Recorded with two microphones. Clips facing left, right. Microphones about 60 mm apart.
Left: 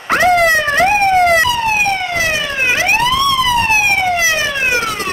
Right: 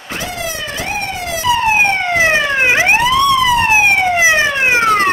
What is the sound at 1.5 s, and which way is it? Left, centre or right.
Emergency vehicle, right.